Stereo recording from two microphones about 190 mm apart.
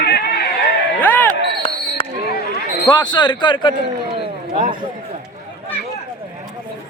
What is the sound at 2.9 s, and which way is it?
Speech, 20° left (ahead or behind).